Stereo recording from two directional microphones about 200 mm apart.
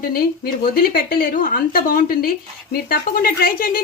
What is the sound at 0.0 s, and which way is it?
A woman's voice, 50° left (ahead or behind).